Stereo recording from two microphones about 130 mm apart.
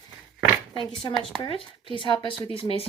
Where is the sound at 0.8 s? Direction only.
40° left (ahead or behind).